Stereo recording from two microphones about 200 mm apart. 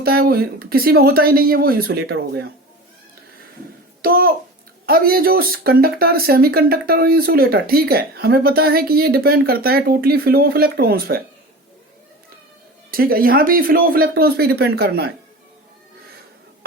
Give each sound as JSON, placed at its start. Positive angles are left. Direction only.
{"t": 0.0, "sound": "speech", "side_deg": -50}
{"t": 4.0, "sound": "speech", "side_deg": -45}
{"t": 12.9, "sound": "speech", "side_deg": -45}